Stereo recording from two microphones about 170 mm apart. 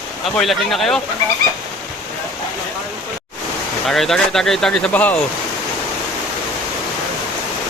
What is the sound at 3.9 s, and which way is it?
Speech, centre (ahead or behind).